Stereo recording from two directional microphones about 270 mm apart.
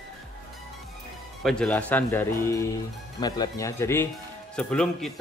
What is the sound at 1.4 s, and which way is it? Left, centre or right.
A man's voice, centre.